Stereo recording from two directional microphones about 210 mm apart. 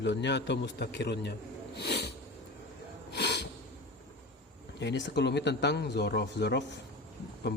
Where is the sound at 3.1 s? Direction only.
55° left (ahead or behind).